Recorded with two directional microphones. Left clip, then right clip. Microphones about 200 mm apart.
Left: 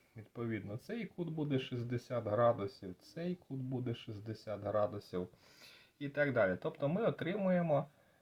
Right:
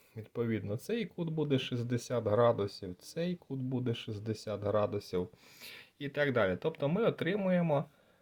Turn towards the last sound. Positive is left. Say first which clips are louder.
# right 2 dB
turn(degrees=-45)  # may be behind; listen again after turning